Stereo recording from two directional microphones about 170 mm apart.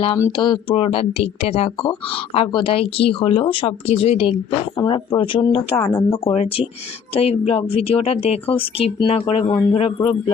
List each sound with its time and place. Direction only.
0.3 s speech: 30° left (ahead or behind)
5.8 s speech: 15° left (ahead or behind)
6.2 s speech: 35° left (ahead or behind)